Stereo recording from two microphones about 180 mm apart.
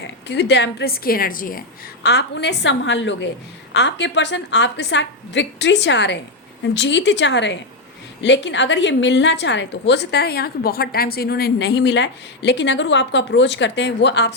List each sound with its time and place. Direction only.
0.0 s a woman's voice: 75° left (ahead or behind); by 1.6 s 50° left (ahead or behind)
2.0 s a woman's voice: 70° left (ahead or behind); by 3.2 s 90° left
3.7 s a woman's voice: 80° left